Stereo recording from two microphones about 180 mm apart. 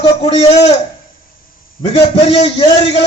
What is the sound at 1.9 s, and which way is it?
Speech, 35° left (ahead or behind).